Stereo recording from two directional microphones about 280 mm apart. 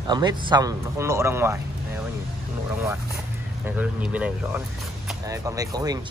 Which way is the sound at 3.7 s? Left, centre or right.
Centre.